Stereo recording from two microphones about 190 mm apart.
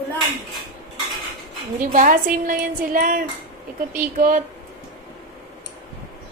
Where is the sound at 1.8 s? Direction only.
45° right (ahead or behind).